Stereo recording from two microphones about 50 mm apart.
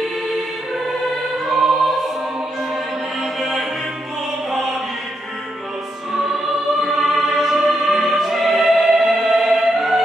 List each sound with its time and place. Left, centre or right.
1.4 s music: centre
3.3 s music: centre
6.3 s music: centre